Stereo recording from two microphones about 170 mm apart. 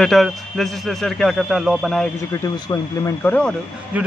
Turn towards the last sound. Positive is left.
turn(degrees=-10)  # may be behind; listen again after turning